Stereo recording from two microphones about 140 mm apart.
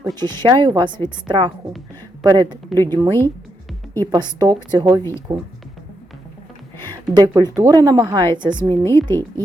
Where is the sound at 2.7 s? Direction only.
15° left (ahead or behind).